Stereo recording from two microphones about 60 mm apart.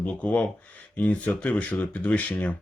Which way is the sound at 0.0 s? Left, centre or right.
Left.